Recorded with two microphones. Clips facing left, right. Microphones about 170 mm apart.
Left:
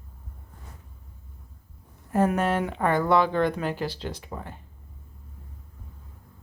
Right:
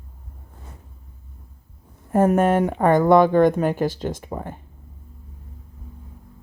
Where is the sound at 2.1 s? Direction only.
50° right (ahead or behind).